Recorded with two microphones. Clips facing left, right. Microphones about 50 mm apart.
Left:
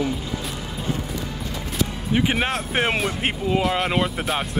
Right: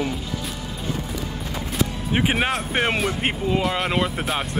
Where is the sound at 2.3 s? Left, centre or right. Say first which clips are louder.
Right 1 dB; centre.